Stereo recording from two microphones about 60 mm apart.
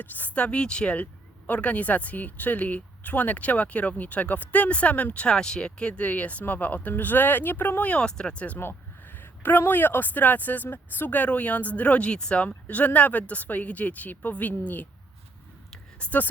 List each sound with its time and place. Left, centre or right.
0.0 s speech: left
8.5 s speech: left
16.0 s speech: left